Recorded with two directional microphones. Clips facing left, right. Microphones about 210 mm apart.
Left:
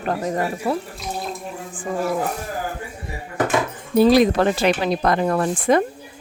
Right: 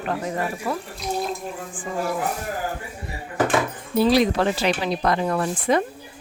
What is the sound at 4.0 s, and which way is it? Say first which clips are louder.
Speech: left 4 dB; 50° left (ahead or behind).